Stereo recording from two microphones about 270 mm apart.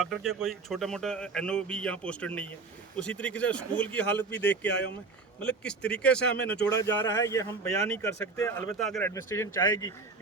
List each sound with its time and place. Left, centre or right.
0.0 s speech: centre
4.3 s speech: left
5.4 s speech: centre